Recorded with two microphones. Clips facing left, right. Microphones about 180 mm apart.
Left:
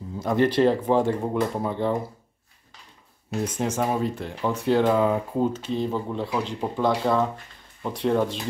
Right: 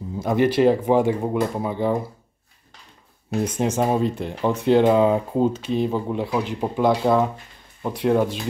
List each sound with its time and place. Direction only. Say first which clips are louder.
0.2 s speech: right 2 dB; 10° right (ahead or behind)
3.5 s speech: right 4 dB; 25° right (ahead or behind); by 8.4 s 5° right (ahead or behind)